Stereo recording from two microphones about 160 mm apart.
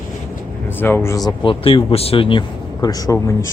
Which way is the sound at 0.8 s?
15° left (ahead or behind).